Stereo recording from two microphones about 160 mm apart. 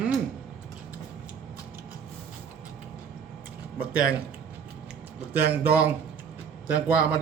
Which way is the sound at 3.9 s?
65° right (ahead or behind).